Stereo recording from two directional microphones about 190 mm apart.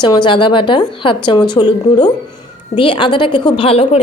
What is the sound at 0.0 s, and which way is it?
A woman's voice, 25° left (ahead or behind).